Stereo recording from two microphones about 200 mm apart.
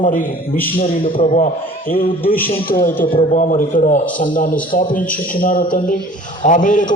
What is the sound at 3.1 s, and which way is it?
A man's voice, 35° left (ahead or behind).